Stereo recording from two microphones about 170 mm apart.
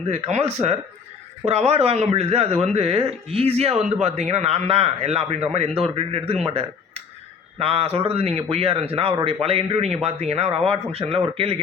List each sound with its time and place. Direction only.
0.1 s speech: 40° right (ahead or behind)